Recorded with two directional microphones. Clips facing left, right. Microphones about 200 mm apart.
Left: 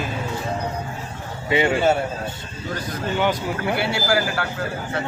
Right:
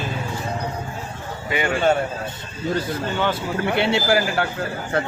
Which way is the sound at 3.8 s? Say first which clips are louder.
Right 5 dB; 25° right (ahead or behind).